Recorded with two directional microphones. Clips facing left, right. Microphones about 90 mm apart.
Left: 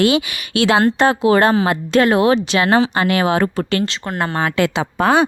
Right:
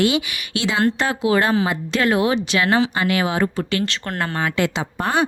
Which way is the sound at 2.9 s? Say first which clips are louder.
Left 4 dB; 50° left (ahead or behind).